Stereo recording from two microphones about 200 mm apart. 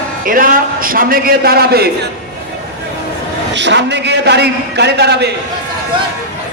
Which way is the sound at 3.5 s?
60° right (ahead or behind).